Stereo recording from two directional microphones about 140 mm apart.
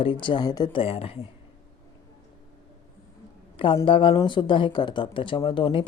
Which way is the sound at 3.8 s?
35° left (ahead or behind).